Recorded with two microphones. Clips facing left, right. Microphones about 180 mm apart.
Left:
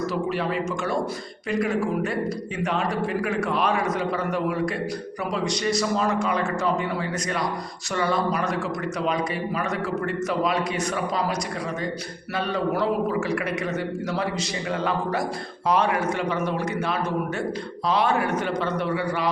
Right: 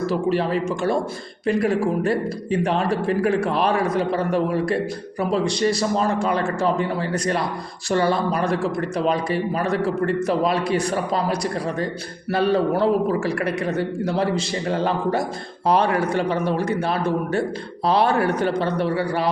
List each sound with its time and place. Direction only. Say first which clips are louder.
0.0 s speech: right 5 dB; 30° right (ahead or behind)
1.5 s speech: right 4 dB; 30° right (ahead or behind)